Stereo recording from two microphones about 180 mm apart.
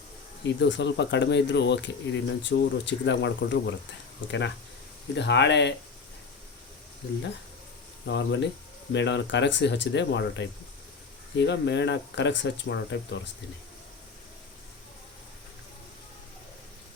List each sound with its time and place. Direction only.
0.4 s speech: 75° left (ahead or behind)
8.0 s speech: 75° left (ahead or behind)